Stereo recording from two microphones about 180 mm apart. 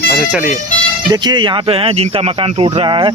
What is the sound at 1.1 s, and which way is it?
Speech, 25° right (ahead or behind).